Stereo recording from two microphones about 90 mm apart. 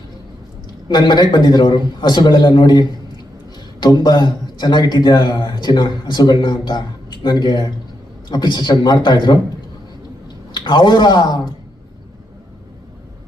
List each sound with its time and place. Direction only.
0.9 s a man's voice: 60° left (ahead or behind)
6.3 s a man's voice: 75° left (ahead or behind); by 9.4 s 60° left (ahead or behind)
10.5 s speech: 55° left (ahead or behind)